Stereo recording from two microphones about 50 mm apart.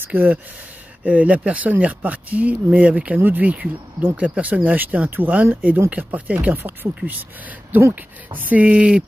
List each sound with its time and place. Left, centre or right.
0.1 s speech: right
7.9 s speech: right